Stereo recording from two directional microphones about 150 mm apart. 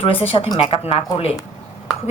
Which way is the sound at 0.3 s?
35° left (ahead or behind).